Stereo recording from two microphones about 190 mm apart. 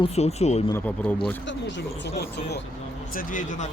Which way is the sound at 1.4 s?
65° left (ahead or behind).